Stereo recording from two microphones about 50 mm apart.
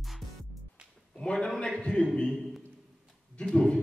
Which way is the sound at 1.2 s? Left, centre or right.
Centre.